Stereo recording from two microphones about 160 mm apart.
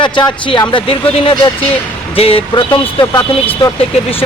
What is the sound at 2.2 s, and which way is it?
A man's voice, 35° left (ahead or behind).